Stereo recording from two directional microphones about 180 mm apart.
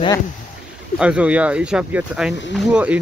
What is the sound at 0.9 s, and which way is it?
Speech, 5° right (ahead or behind).